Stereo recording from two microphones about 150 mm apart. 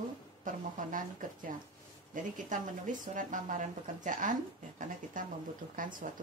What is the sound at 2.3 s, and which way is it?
A woman's voice, 60° right (ahead or behind).